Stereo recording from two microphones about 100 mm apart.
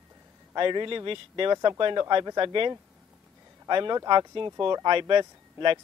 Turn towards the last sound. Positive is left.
turn(degrees=-55)  # may be behind; listen again after turning